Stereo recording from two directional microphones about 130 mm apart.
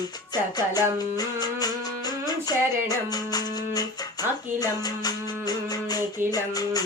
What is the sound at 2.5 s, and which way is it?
Speech, 30° left (ahead or behind).